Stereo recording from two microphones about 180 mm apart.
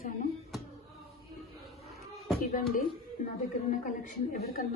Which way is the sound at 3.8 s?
50° left (ahead or behind).